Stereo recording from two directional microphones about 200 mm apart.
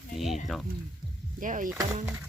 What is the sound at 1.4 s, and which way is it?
Speech, 40° right (ahead or behind).